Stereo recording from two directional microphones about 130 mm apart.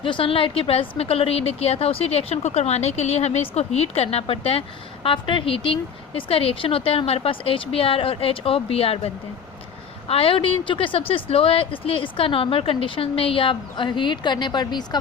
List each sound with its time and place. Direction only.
0.0 s a woman's voice: 40° left (ahead or behind)